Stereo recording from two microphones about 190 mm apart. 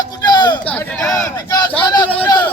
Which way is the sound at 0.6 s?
10° left (ahead or behind).